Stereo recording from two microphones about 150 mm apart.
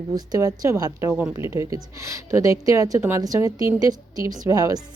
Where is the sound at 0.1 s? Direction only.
25° right (ahead or behind).